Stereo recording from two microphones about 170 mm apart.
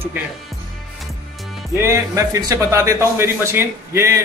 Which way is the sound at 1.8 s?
15° right (ahead or behind).